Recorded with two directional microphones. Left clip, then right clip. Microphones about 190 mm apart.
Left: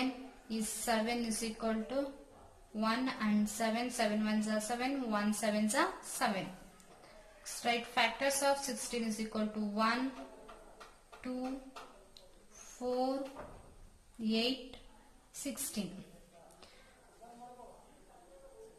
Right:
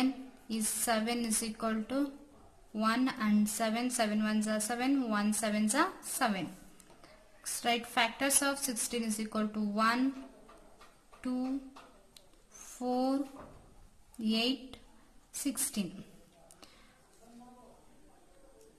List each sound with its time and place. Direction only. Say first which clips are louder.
0.0 s a woman's voice: right 4 dB; 40° right (ahead or behind)
7.6 s a woman's voice: right 2 dB; 45° right (ahead or behind)
11.1 s speech: right 4 dB; 45° right (ahead or behind)
12.7 s a woman's voice: right 2 dB; 45° right (ahead or behind)
14.2 s a woman's voice: right 2 dB; 45° right (ahead or behind)